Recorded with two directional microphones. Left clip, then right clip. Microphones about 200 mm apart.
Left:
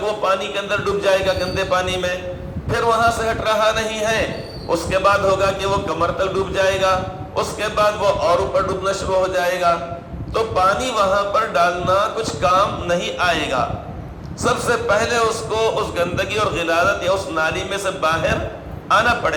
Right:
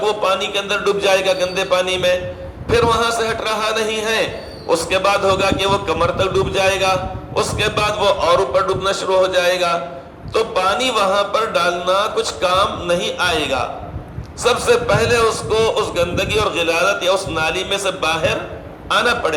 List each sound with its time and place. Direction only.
0.0 s a man's voice: 35° right (ahead or behind)